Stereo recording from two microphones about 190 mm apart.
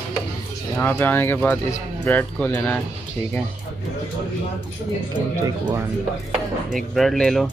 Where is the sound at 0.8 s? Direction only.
10° left (ahead or behind).